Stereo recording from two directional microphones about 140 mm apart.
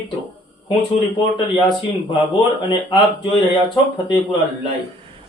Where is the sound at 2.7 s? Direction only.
35° left (ahead or behind).